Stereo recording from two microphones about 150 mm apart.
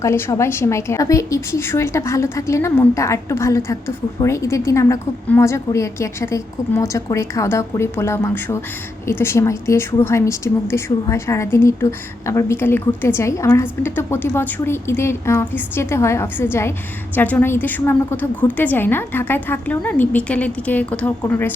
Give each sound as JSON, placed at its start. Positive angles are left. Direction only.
{"t": 0.0, "sound": "a woman's voice", "side_deg": 20}